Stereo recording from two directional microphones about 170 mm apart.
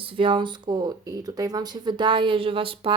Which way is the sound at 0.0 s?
30° right (ahead or behind).